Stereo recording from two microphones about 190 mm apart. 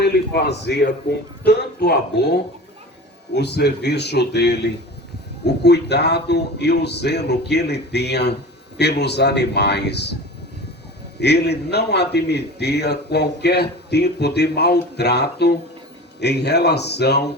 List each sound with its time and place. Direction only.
0.0 s a man's voice: 60° left (ahead or behind)
11.2 s a man's voice: 60° left (ahead or behind)